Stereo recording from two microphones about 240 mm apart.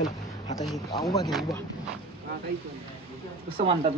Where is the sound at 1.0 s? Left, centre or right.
Centre.